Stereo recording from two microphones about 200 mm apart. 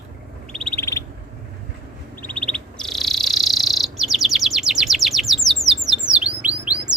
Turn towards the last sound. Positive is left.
turn(degrees=-5)  # may be behind; listen again after turning